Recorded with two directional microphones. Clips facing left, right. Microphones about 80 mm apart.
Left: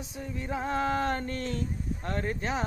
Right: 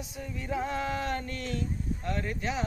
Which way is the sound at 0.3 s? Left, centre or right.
Left.